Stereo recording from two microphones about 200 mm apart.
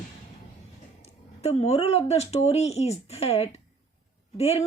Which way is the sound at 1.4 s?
30° left (ahead or behind).